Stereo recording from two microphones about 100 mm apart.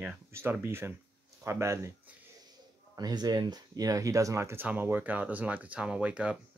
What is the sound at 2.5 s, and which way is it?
Speech, 45° right (ahead or behind).